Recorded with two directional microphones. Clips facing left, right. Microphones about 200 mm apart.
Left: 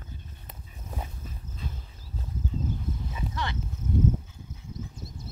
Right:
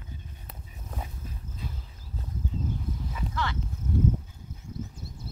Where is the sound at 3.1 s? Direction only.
20° left (ahead or behind).